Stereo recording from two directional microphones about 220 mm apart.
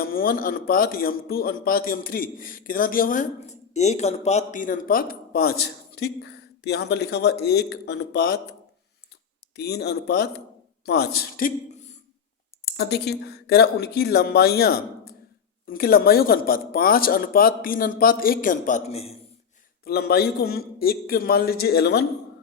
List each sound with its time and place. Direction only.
0.0 s a man's voice: 40° left (ahead or behind)
9.6 s a man's voice: 45° left (ahead or behind); by 19.1 s 30° left (ahead or behind)
19.8 s speech: 45° left (ahead or behind)